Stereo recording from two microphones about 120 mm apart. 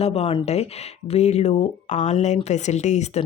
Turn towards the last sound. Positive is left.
turn(degrees=75)  # may be behind; listen again after turning